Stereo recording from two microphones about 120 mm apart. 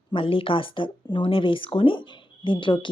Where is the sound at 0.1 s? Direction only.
45° left (ahead or behind).